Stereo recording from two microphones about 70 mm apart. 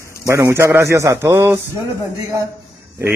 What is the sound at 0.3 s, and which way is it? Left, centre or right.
Speech, right.